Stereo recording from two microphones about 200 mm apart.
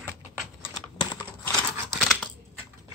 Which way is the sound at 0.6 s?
20° left (ahead or behind).